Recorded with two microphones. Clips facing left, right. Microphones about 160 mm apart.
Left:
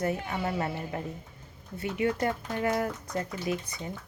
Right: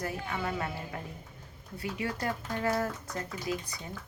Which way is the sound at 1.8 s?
20° left (ahead or behind).